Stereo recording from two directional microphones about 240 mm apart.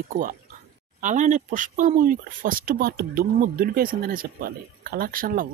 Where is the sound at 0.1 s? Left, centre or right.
Right.